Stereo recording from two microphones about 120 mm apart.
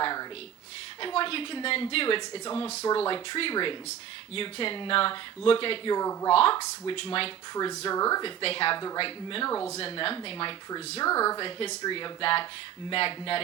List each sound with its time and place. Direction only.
0.0 s a sound: 35° left (ahead or behind)
1.0 s a woman's voice: 50° left (ahead or behind)
6.0 s speech: 30° left (ahead or behind)
6.3 s a woman's voice: 50° left (ahead or behind)
7.5 s speech: 30° left (ahead or behind)
8.2 s a woman's voice: 50° left (ahead or behind)
9.5 s speech: 20° left (ahead or behind)
9.7 s a woman's voice: 50° left (ahead or behind)
11.0 s speech: 30° left (ahead or behind)
11.3 s a woman's voice: 50° left (ahead or behind)